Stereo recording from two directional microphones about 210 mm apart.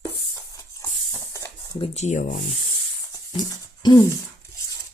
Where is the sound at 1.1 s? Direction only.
15° left (ahead or behind).